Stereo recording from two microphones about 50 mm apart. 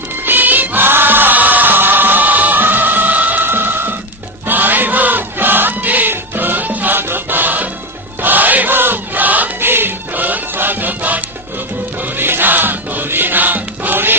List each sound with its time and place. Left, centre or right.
0.2 s music: right
3.4 s music: right
8.2 s choir: right
9.6 s music: right
12.0 s music: right